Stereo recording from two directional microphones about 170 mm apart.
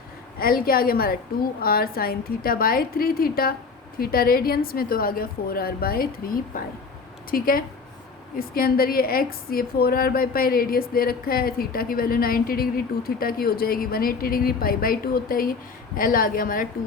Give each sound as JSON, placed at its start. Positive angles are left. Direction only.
{"t": 0.3, "sound": "a woman's voice", "side_deg": 60}